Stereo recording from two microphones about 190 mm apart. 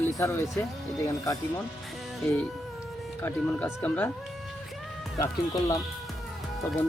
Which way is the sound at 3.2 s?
10° left (ahead or behind).